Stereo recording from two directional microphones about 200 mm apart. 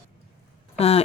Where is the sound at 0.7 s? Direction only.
30° left (ahead or behind).